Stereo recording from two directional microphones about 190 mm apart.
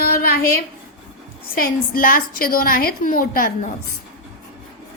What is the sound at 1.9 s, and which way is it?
Speech, 50° left (ahead or behind).